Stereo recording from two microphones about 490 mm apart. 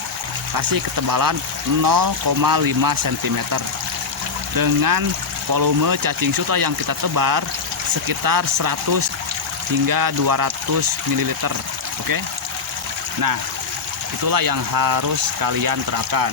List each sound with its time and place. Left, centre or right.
0.5 s speech: right
14.3 s speech: right